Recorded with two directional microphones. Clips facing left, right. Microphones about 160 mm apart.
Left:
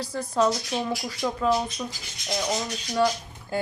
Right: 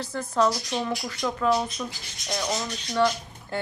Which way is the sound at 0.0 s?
10° left (ahead or behind).